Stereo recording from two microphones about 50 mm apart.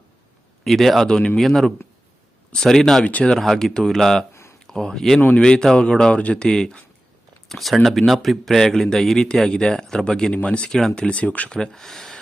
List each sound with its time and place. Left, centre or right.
0.6 s speech: centre
3.0 s speech: left
3.6 s speech: centre
7.4 s speech: centre; by 10.7 s left
10.7 s speech: centre; by 11.4 s left
11.4 s speech: centre